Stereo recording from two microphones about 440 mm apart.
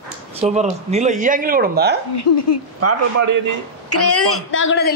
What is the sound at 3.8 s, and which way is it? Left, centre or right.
A woman's voice, left.